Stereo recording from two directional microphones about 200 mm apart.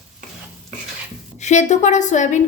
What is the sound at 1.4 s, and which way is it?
Speech, 35° left (ahead or behind).